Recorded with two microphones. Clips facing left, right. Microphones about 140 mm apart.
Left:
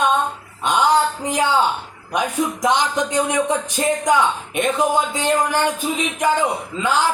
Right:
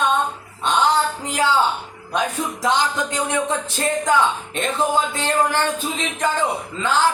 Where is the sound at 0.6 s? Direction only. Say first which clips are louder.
Left 2 dB; 10° left (ahead or behind).